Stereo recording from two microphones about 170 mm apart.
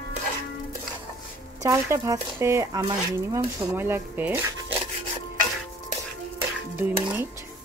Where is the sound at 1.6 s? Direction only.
15° right (ahead or behind).